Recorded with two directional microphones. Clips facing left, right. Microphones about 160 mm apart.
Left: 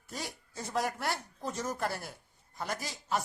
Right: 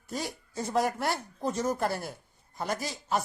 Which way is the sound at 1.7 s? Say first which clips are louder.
Right 5 dB; 45° right (ahead or behind).